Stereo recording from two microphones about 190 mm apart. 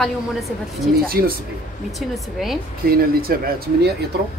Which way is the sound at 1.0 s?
50° right (ahead or behind).